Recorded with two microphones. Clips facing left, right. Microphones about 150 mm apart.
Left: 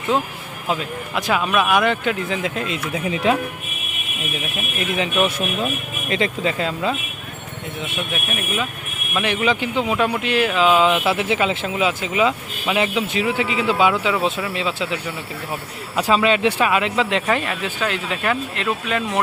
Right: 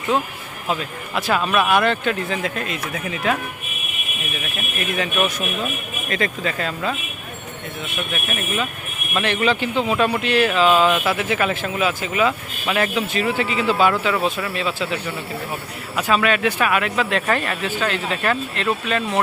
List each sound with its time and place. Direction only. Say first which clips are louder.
0.7 s speech: left 1 dB; 10° left (ahead or behind)
4.9 s speech: left 2 dB; 20° left (ahead or behind)
8.1 s speech: right 2 dB; 10° left (ahead or behind)
16.0 s speech: left 2 dB; 30° left (ahead or behind); by 19.2 s 10° left (ahead or behind)